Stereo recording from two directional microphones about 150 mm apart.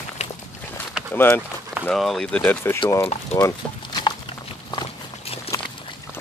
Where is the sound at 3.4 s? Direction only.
30° left (ahead or behind).